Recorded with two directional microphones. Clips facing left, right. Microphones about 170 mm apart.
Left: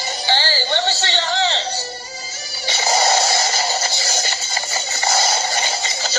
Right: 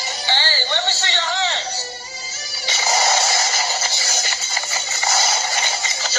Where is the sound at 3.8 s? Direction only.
35° left (ahead or behind).